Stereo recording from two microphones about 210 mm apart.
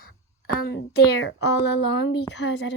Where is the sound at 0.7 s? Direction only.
50° left (ahead or behind).